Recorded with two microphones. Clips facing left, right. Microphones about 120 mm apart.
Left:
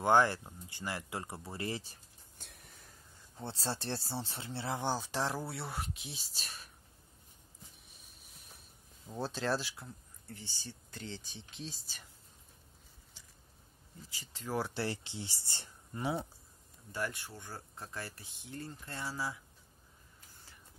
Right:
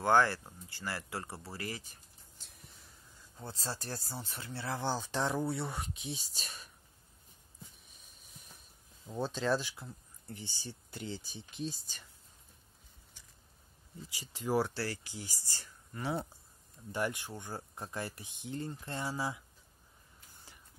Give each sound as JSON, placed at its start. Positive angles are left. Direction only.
{"t": 0.0, "sound": "speech", "side_deg": 15}
{"t": 2.3, "sound": "a sound", "side_deg": 55}
{"t": 3.3, "sound": "speech", "side_deg": 30}
{"t": 7.9, "sound": "a sound", "side_deg": 0}
{"t": 9.0, "sound": "speech", "side_deg": 0}
{"t": 10.3, "sound": "speech", "side_deg": -15}
{"t": 14.1, "sound": "speech", "side_deg": -15}
{"t": 14.7, "sound": "speech", "side_deg": 25}
{"t": 16.9, "sound": "speech", "side_deg": -20}